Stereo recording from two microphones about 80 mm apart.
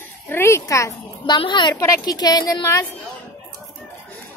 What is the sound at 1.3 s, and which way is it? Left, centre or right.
Speech, left.